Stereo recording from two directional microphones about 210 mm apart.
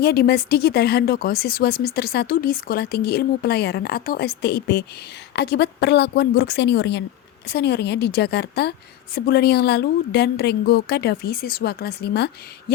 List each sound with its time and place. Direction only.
0.0 s speech: 50° left (ahead or behind)